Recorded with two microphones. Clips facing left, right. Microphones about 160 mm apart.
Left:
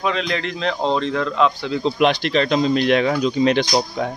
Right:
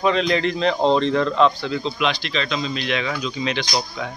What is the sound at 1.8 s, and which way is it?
Speech, 50° left (ahead or behind).